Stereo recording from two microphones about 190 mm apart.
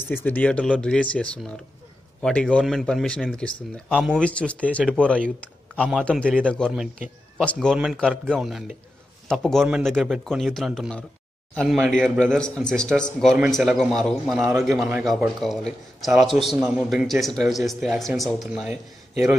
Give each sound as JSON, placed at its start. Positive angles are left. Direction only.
{"t": 0.0, "sound": "a man's voice", "side_deg": 10}